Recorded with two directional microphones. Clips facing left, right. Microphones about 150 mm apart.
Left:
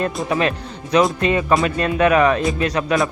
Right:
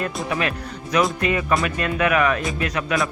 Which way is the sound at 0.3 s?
30° left (ahead or behind).